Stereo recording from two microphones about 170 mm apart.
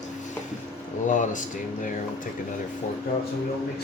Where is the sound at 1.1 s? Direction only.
50° left (ahead or behind).